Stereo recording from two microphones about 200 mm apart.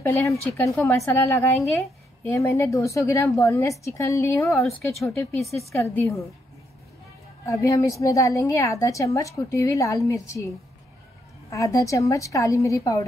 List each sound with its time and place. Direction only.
0.2 s a woman's voice: 15° left (ahead or behind)
7.4 s a woman's voice: 15° left (ahead or behind)
11.5 s a woman's voice: 15° left (ahead or behind)